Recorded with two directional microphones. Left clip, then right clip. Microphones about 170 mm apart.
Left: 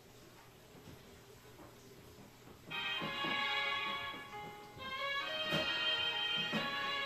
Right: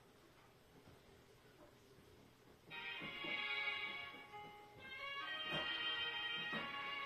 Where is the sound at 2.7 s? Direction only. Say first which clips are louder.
Left 9 dB; 25° left (ahead or behind).